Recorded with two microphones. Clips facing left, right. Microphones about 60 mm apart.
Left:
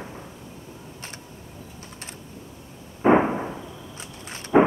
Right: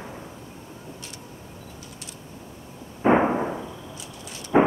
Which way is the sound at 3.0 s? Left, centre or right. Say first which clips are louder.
Left 1 dB; centre.